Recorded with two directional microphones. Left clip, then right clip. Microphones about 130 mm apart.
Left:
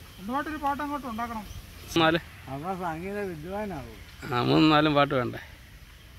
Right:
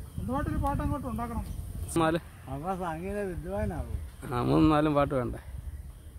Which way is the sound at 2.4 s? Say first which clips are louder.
Left 1 dB; 25° left (ahead or behind).